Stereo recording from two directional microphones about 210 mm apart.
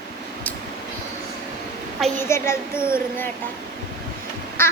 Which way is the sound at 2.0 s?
10° left (ahead or behind).